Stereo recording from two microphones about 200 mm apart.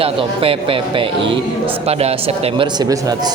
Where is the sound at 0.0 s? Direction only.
25° right (ahead or behind).